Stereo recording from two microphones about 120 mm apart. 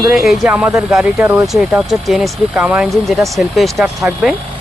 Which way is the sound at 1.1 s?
20° right (ahead or behind).